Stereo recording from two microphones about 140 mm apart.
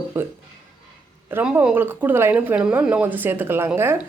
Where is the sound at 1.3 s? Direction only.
15° right (ahead or behind).